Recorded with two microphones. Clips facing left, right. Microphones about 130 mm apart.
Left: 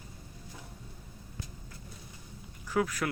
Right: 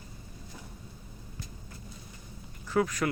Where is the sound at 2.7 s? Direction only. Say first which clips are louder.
Right 3 dB; 5° left (ahead or behind).